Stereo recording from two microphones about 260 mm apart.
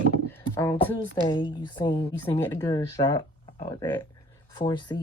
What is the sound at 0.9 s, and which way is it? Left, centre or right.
Speech, centre.